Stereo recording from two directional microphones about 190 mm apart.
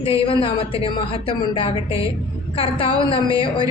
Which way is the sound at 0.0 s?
30° left (ahead or behind).